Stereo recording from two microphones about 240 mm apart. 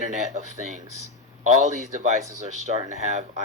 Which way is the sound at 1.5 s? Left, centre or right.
Right.